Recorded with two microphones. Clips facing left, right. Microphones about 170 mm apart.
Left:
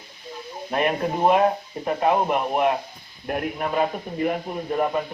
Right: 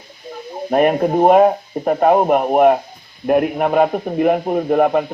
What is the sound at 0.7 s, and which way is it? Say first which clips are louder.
Speech: right 9 dB; 50° right (ahead or behind).